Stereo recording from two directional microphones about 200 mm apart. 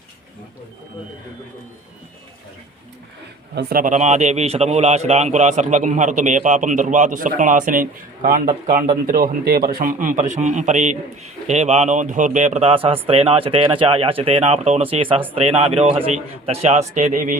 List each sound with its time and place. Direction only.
3.5 s a man's voice: 50° right (ahead or behind)